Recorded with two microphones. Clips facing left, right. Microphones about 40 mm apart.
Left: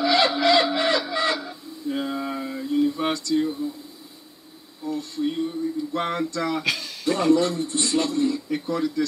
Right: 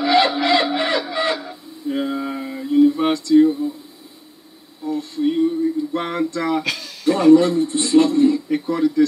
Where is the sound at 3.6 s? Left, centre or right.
Right.